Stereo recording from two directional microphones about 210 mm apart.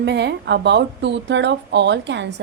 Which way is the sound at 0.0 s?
55° right (ahead or behind).